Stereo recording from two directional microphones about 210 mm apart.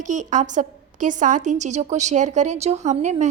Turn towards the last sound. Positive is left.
turn(degrees=-30)  # may be behind; listen again after turning